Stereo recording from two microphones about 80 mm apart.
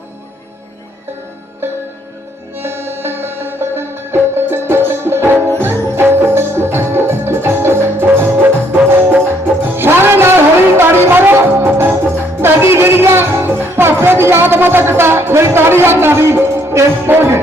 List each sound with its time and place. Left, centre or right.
1.6 s music: right